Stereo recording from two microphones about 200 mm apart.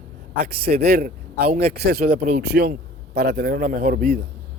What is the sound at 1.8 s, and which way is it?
Speech, 55° right (ahead or behind).